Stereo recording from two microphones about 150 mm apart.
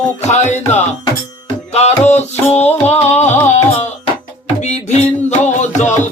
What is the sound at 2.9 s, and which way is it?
Music, 45° left (ahead or behind).